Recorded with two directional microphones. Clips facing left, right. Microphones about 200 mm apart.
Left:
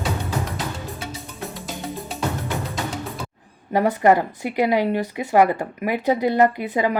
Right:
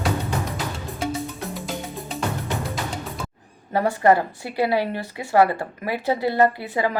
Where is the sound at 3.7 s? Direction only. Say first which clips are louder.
Left 1 dB; 15° left (ahead or behind).